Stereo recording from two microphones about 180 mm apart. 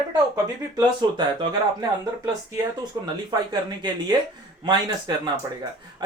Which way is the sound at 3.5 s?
25° right (ahead or behind).